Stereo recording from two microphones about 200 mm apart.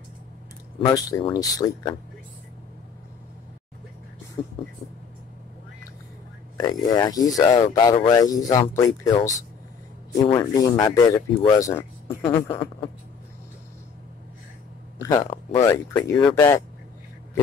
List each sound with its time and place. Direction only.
0.8 s speech: 20° left (ahead or behind)
4.4 s speech: 25° left (ahead or behind)
6.5 s speech: 20° left (ahead or behind)
15.0 s speech: 15° left (ahead or behind)